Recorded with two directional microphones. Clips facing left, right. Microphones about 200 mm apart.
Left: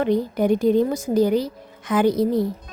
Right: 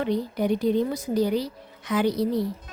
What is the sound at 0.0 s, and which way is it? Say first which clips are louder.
A woman's voice: left 5 dB; 50° left (ahead or behind).